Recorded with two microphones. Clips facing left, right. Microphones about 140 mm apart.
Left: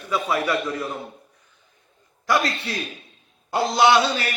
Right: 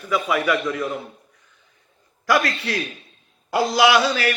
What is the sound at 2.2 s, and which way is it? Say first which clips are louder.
Speech: right 2 dB; 25° left (ahead or behind).